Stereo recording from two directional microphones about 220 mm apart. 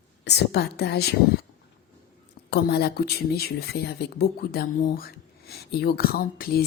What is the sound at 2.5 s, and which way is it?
Speech, 50° left (ahead or behind).